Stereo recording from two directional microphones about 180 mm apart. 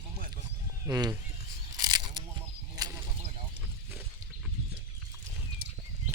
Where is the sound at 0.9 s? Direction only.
20° right (ahead or behind).